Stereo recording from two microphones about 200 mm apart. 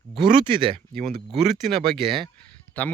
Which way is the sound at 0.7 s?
30° right (ahead or behind).